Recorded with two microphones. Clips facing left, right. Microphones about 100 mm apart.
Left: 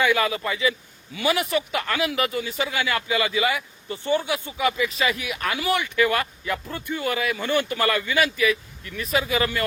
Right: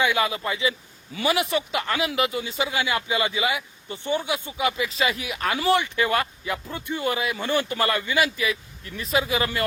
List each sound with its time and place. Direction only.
0.0 s speech: 25° right (ahead or behind)